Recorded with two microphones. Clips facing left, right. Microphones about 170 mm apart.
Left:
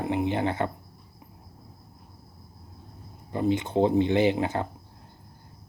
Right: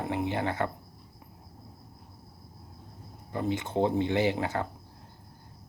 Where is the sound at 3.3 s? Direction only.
20° left (ahead or behind).